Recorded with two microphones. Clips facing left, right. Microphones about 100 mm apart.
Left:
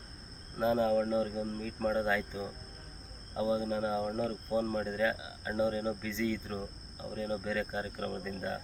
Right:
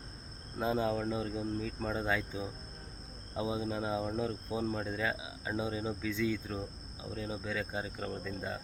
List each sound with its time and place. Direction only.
0.6 s speech: 5° right (ahead or behind)
3.3 s speech: 10° right (ahead or behind)